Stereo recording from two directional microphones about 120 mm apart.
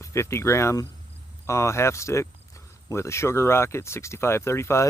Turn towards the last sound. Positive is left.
turn(degrees=20)  # may be behind; listen again after turning